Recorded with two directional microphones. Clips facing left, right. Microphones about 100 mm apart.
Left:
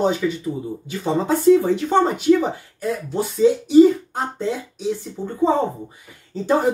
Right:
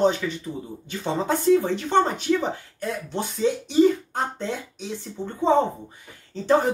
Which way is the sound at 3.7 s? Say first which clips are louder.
Left 5 dB; 5° left (ahead or behind).